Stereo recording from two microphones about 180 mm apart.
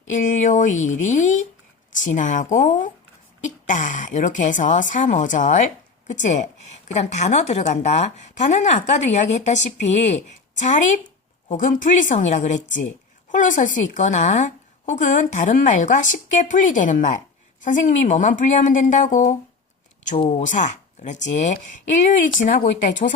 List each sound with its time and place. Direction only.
0.1 s a woman's voice: 45° left (ahead or behind)
20.4 s a woman's voice: 45° left (ahead or behind)